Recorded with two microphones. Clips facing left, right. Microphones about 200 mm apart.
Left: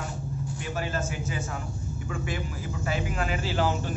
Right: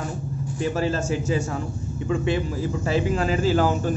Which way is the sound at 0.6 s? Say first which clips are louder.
Right 9 dB; 35° right (ahead or behind).